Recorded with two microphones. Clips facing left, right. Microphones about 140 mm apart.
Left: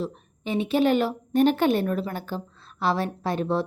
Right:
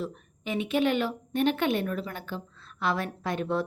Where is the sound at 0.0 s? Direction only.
30° left (ahead or behind).